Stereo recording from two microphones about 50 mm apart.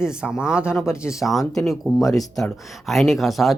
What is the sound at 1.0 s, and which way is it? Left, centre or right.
Speech, left.